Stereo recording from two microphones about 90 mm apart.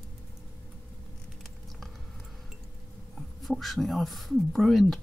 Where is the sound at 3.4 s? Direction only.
Centre (ahead or behind).